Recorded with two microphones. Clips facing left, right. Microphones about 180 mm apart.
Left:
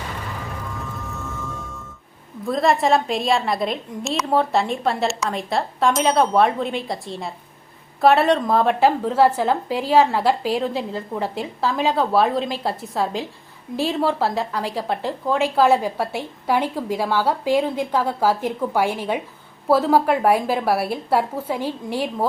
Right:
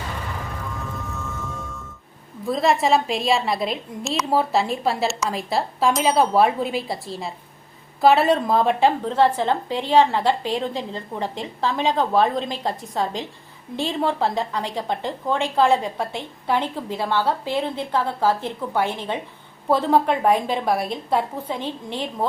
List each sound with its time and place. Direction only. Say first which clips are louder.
0.8 s music: even; centre (ahead or behind)
2.5 s a woman's voice: left 1 dB; centre (ahead or behind)